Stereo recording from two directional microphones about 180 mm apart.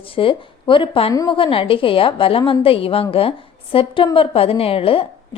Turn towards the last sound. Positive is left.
turn(degrees=30)  # may be behind; listen again after turning